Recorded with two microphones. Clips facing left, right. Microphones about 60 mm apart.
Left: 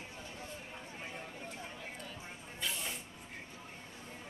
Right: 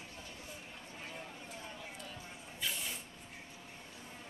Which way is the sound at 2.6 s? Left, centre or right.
Centre.